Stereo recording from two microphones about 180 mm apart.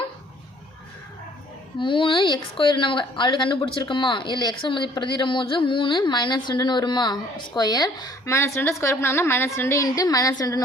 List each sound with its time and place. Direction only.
1.8 s a woman's voice: 30° left (ahead or behind)